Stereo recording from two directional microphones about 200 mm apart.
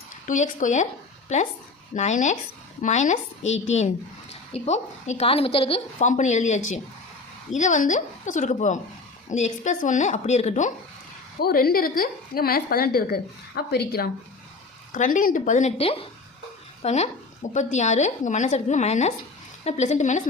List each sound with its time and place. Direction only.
0.3 s a woman's voice: 40° left (ahead or behind)
11.3 s a woman's voice: 50° left (ahead or behind)
14.9 s a woman's voice: 40° left (ahead or behind)